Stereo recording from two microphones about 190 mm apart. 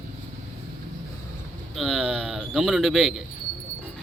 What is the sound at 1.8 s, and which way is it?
Speech, centre (ahead or behind).